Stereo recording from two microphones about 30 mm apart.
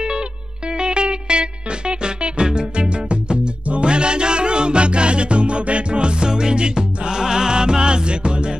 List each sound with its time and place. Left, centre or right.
0.7 s music: right